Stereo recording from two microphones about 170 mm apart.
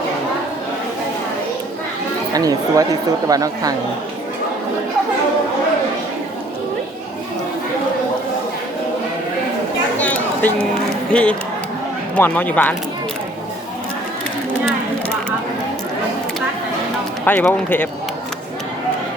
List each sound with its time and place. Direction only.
2.3 s speech: 20° right (ahead or behind)
10.0 s a sound: 10° left (ahead or behind)
11.1 s speech: 5° left (ahead or behind)
17.2 s speech: 10° left (ahead or behind)